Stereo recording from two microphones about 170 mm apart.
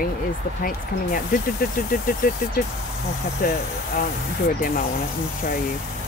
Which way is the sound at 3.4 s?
55° left (ahead or behind).